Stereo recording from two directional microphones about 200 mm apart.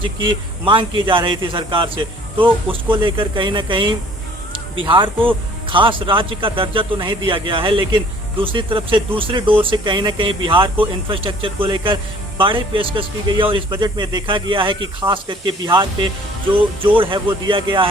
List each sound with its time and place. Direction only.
0.0 s speech: 25° right (ahead or behind)